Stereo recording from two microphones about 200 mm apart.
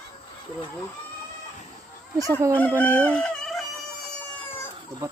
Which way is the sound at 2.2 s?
15° right (ahead or behind).